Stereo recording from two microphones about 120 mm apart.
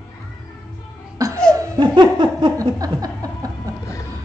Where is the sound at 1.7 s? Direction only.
40° right (ahead or behind).